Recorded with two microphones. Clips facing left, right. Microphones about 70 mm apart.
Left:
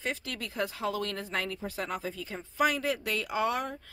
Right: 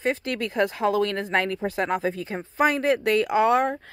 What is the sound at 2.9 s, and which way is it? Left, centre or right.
Speech, right.